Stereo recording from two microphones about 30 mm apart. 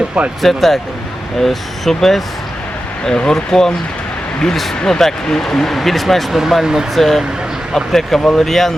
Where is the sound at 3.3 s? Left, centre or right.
Centre.